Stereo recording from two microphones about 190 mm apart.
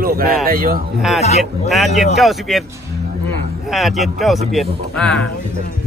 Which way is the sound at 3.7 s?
Centre (ahead or behind).